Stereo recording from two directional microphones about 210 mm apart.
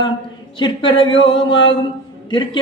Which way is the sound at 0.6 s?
25° left (ahead or behind).